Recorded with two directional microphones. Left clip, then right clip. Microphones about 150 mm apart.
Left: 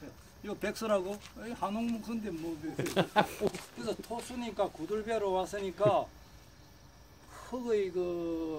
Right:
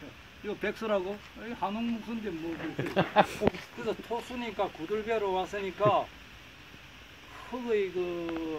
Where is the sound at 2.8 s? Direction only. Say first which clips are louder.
Right 4 dB; 35° right (ahead or behind).